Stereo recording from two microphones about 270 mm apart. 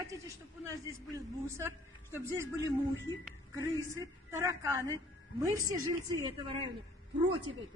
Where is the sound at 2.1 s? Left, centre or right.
Centre.